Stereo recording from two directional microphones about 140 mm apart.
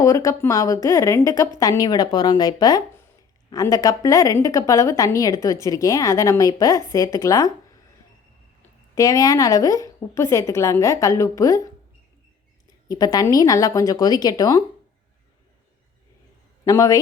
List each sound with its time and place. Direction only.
0.0 s a woman's voice: 25° left (ahead or behind)
9.0 s a woman's voice: 25° left (ahead or behind)
12.9 s a woman's voice: 25° left (ahead or behind)
16.6 s a woman's voice: 25° left (ahead or behind)